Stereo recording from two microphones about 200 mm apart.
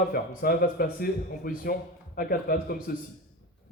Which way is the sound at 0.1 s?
50° left (ahead or behind).